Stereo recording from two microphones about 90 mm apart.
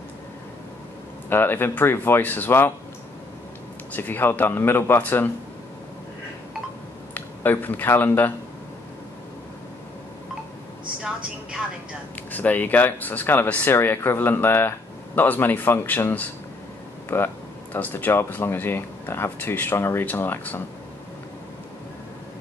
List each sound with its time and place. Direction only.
1.3 s speech: 25° left (ahead or behind)
3.9 s speech: 20° left (ahead or behind)
7.2 s speech: 20° left (ahead or behind)
12.3 s speech: 20° left (ahead or behind)